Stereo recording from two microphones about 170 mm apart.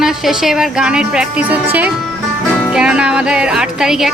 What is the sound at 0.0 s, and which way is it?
Speech, centre (ahead or behind).